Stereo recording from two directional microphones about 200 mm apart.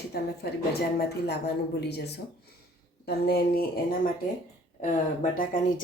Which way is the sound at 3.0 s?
50° left (ahead or behind).